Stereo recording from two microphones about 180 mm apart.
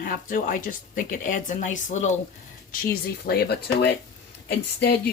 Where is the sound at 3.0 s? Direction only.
60° left (ahead or behind).